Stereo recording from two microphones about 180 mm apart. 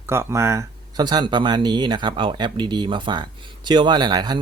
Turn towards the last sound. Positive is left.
turn(degrees=-25)  # may be behind; listen again after turning